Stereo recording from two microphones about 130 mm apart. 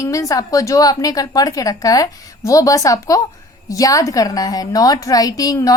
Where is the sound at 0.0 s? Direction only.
25° left (ahead or behind).